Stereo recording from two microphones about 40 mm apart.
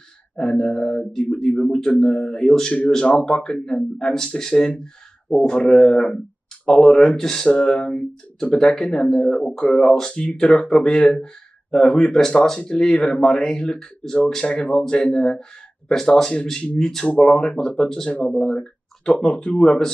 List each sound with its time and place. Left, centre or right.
0.4 s speech: centre
3.1 s speech: left
3.3 s speech: centre
14.4 s speech: left
15.9 s speech: centre
18.1 s speech: left